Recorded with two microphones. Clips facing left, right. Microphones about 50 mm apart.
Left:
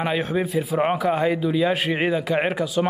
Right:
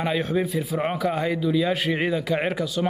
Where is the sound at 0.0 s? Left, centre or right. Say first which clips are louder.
Left 1 dB; centre.